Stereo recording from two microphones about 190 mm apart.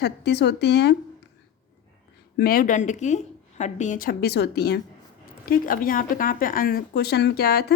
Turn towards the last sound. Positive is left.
turn(degrees=55)  # may be behind; listen again after turning